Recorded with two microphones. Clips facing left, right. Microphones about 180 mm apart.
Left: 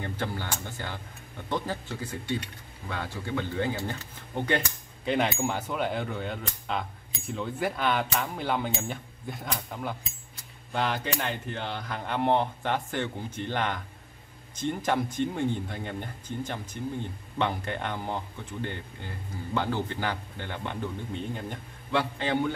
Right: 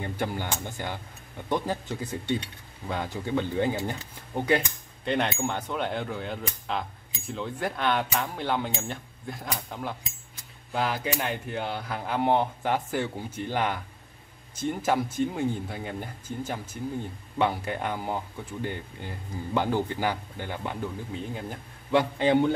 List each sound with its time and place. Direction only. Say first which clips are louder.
0.0 s speech: right 2 dB; 15° right (ahead or behind)
5.0 s speech: even; 5° left (ahead or behind)
21.9 s speech: right 5 dB; 20° right (ahead or behind)